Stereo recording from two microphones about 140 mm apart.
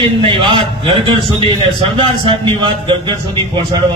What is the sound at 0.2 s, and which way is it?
A man's voice, 40° right (ahead or behind).